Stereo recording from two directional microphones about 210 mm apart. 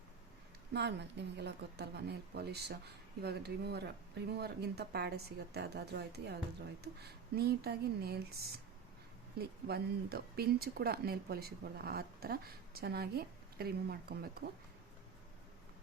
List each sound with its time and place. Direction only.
0.7 s speech: 55° right (ahead or behind)
9.4 s speech: 50° right (ahead or behind)